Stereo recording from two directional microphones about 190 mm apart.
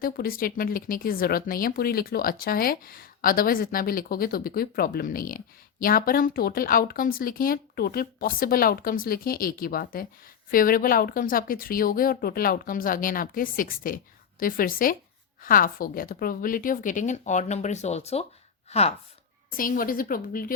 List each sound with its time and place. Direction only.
0.0 s speech: 50° left (ahead or behind); by 18.9 s 35° left (ahead or behind)
19.5 s speech: 45° left (ahead or behind)